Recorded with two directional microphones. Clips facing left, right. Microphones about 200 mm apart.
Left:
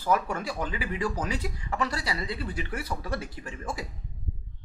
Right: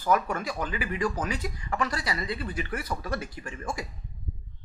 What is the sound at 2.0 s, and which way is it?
Speech, 30° left (ahead or behind).